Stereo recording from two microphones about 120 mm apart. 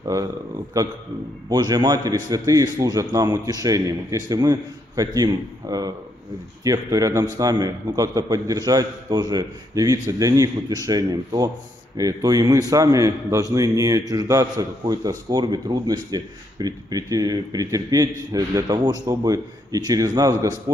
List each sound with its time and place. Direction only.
0.0 s a man's voice: 30° right (ahead or behind)